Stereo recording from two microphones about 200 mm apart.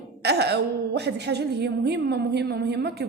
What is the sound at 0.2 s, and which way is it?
A woman's voice, 55° right (ahead or behind).